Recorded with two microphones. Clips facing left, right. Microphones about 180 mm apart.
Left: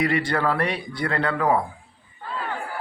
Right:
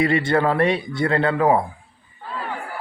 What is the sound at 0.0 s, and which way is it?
A man's voice, 25° right (ahead or behind).